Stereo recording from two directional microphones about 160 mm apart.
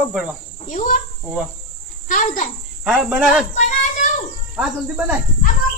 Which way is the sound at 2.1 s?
50° left (ahead or behind).